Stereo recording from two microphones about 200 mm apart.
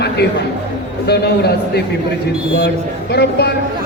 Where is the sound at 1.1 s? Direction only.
55° left (ahead or behind).